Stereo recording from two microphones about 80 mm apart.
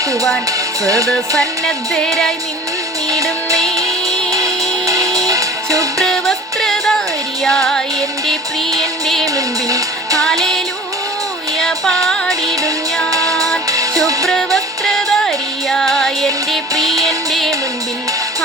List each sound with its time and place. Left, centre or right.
0.9 s music: right
1.4 s music: centre
4.3 s music: right
6.0 s music: centre
9.2 s music: right
11.6 s music: centre
13.1 s music: right
14.3 s music: centre